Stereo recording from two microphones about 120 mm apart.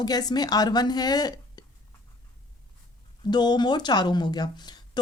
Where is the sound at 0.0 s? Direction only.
35° left (ahead or behind).